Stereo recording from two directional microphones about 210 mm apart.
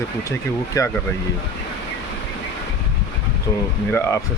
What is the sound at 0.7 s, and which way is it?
Speech, 15° left (ahead or behind).